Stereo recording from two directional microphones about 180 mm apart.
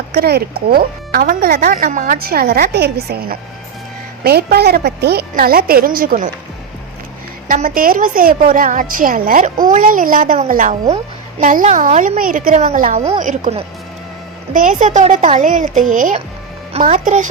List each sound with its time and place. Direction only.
0.1 s speech: 60° right (ahead or behind)
7.4 s a woman's voice: 50° right (ahead or behind)